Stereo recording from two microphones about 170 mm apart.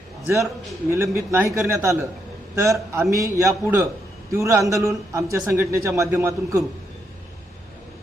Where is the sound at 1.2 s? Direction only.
15° right (ahead or behind).